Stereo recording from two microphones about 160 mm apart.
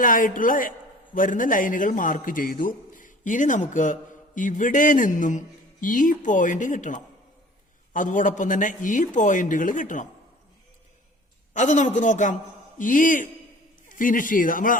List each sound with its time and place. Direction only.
0.0 s a man's voice: 55° left (ahead or behind)
11.5 s a man's voice: 50° left (ahead or behind)